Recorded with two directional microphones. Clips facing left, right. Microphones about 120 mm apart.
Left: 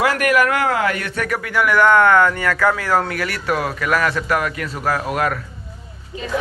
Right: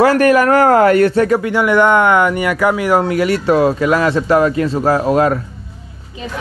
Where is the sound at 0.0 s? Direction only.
35° right (ahead or behind).